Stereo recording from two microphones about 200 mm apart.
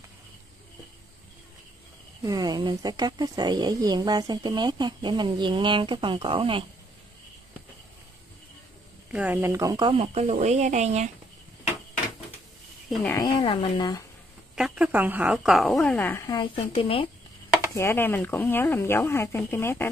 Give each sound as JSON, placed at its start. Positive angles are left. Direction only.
{"t": 2.2, "sound": "speech", "side_deg": -20}
{"t": 9.1, "sound": "speech", "side_deg": -10}
{"t": 12.9, "sound": "speech", "side_deg": 5}
{"t": 13.2, "sound": "speech", "side_deg": 25}
{"t": 14.5, "sound": "a woman's voice", "side_deg": -5}
{"t": 16.5, "sound": "speech", "side_deg": 30}
{"t": 17.7, "sound": "speech", "side_deg": 10}